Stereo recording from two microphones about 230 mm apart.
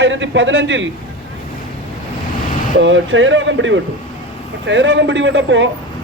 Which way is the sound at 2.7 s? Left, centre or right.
Right.